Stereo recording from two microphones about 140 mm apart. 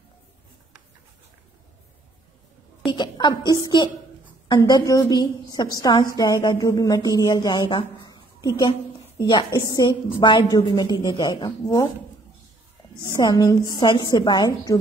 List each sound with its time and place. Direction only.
2.9 s a woman's voice: 35° left (ahead or behind)
13.1 s a woman's voice: 25° left (ahead or behind)